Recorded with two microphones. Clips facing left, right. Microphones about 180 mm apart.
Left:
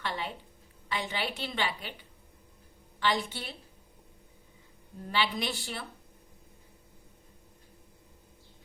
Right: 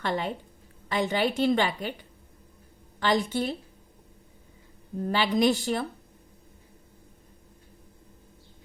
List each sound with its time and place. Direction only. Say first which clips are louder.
0.0 s a woman's voice: right 7 dB; 45° right (ahead or behind)
5.0 s a woman's voice: right 9 dB; 40° right (ahead or behind)